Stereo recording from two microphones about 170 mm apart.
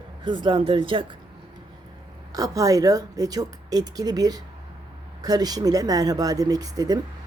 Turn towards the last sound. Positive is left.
turn(degrees=-20)  # may be behind; listen again after turning